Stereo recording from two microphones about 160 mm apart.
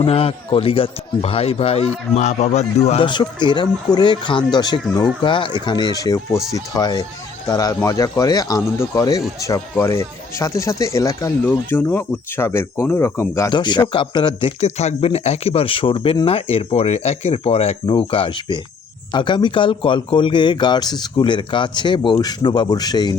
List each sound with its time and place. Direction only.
0.0 s speech: 35° left (ahead or behind)
3.1 s speech: 30° left (ahead or behind)
13.5 s speech: 30° left (ahead or behind)